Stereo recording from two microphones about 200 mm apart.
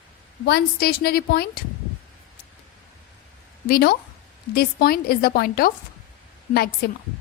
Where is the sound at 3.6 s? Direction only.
50° left (ahead or behind).